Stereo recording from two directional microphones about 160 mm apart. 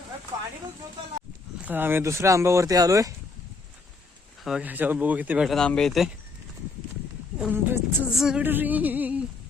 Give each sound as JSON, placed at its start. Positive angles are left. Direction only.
{"t": 1.6, "sound": "speech", "side_deg": -10}
{"t": 4.4, "sound": "speech", "side_deg": -5}
{"t": 5.5, "sound": "speech", "side_deg": 5}
{"t": 7.3, "sound": "speech", "side_deg": -10}
{"t": 8.1, "sound": "speech", "side_deg": -5}